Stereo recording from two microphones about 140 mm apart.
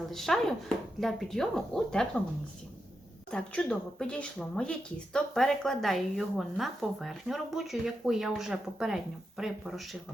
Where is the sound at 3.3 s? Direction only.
5° left (ahead or behind).